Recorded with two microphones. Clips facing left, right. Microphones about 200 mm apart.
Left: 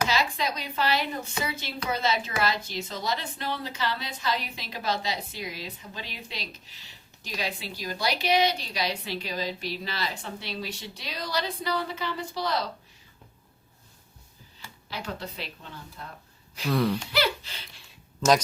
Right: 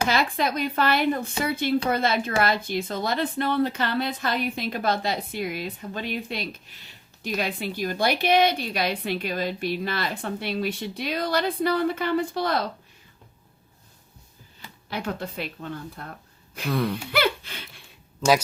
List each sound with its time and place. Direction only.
0.1 s a woman's voice: 55° right (ahead or behind)
14.8 s a woman's voice: 55° right (ahead or behind)
16.6 s speech: centre (ahead or behind)
17.1 s speech: 55° right (ahead or behind)